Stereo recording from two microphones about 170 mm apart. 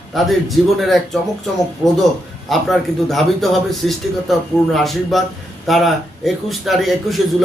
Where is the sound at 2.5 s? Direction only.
Centre (ahead or behind).